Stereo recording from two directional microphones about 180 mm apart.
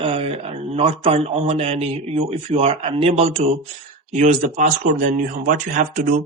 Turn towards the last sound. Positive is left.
turn(degrees=-45)  # may be behind; listen again after turning